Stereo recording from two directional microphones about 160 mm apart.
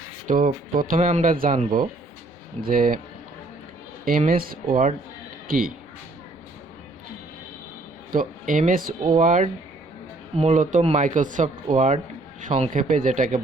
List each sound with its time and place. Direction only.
0.3 s speech: 60° right (ahead or behind)
4.3 s speech: 65° right (ahead or behind)
8.1 s speech: 60° right (ahead or behind)